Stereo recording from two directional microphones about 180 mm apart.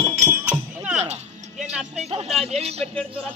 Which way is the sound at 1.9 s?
35° right (ahead or behind).